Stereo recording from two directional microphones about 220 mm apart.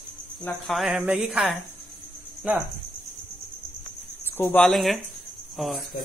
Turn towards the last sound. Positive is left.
turn(degrees=0)  # may be behind; listen again after turning